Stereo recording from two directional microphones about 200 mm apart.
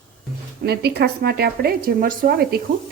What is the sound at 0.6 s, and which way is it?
A woman's voice, 55° right (ahead or behind).